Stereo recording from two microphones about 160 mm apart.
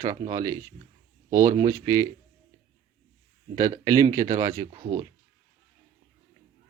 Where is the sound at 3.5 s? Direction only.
20° right (ahead or behind).